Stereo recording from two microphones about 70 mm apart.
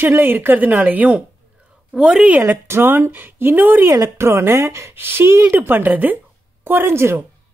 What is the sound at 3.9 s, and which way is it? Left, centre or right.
Speech, right.